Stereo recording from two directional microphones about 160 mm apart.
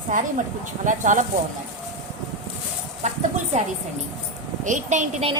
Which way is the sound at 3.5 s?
45° right (ahead or behind).